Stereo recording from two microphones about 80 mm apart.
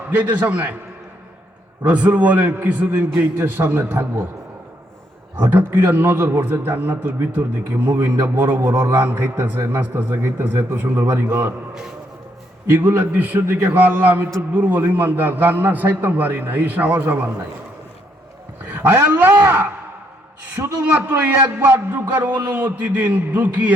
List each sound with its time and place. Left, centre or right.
0.1 s a man's voice: right
1.8 s a man's voice: centre
5.4 s a man's voice: right
12.7 s a man's voice: right
18.6 s a man's voice: right
20.8 s a man's voice: right